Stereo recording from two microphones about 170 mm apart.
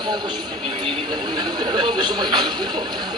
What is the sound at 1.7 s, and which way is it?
Speech, 25° right (ahead or behind).